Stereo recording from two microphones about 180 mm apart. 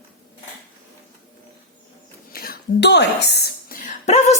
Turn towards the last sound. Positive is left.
turn(degrees=40)  # may be behind; listen again after turning